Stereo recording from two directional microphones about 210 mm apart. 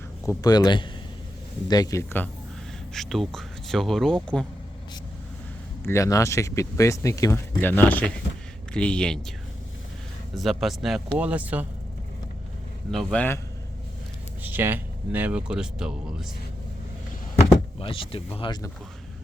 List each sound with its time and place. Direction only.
0.3 s speech: 20° left (ahead or behind)
5.8 s speech: 15° left (ahead or behind)
10.3 s speech: centre (ahead or behind)
12.9 s speech: centre (ahead or behind)
14.4 s speech: 10° right (ahead or behind)
17.7 s speech: 25° left (ahead or behind)